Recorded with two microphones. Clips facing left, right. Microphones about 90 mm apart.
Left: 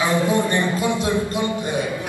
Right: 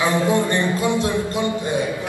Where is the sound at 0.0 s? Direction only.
20° left (ahead or behind).